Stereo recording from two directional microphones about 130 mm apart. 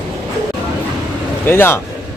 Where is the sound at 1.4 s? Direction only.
15° left (ahead or behind).